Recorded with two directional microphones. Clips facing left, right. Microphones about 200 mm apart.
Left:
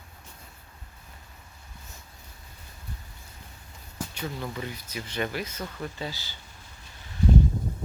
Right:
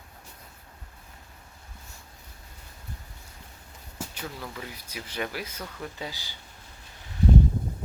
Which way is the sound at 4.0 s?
5° right (ahead or behind).